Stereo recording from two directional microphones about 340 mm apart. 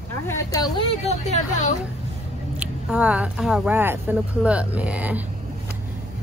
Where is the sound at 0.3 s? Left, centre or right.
Centre.